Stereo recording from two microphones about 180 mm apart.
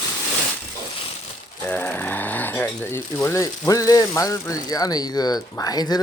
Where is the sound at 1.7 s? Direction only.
10° left (ahead or behind).